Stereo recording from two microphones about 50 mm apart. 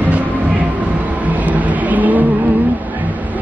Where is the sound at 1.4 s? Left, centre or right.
Right.